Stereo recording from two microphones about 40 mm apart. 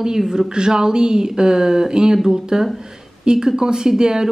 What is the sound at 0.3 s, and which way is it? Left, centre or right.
Speech, centre.